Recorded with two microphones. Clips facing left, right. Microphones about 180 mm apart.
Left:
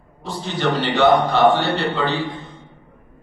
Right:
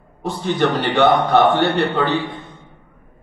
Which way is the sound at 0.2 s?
55° right (ahead or behind).